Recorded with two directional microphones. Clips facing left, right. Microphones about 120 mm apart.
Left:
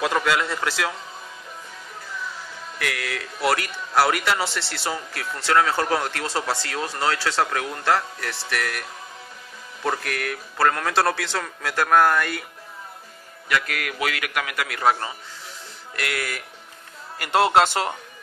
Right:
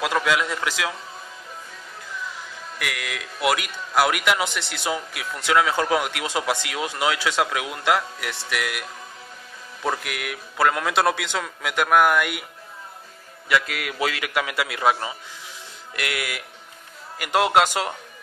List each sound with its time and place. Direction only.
0.0 s a sound: 5° right (ahead or behind)
0.6 s a man's voice: 5° right (ahead or behind)
2.8 s a man's voice: 5° right (ahead or behind)
4.9 s speech: 10° right (ahead or behind)
9.8 s speech: 10° right (ahead or behind)
13.5 s a man's voice: 20° right (ahead or behind); by 17.9 s 5° right (ahead or behind)